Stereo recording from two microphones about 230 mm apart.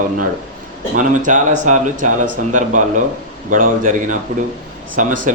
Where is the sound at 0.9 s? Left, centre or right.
Right.